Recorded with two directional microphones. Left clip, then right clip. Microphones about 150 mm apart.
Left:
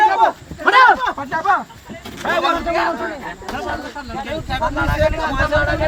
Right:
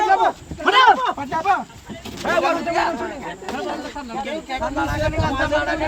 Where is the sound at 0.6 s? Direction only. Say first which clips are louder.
Left 3 dB; 20° left (ahead or behind).